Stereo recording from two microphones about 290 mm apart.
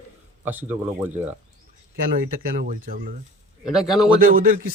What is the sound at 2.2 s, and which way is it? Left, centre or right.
Speech, right.